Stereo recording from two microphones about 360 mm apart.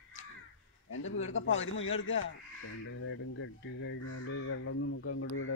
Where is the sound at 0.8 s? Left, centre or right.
Left.